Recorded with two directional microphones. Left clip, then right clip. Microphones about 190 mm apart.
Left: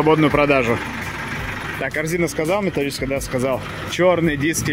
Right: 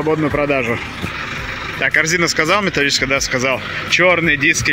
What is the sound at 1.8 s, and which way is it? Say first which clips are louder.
Speech: right 8 dB; 10° left (ahead or behind).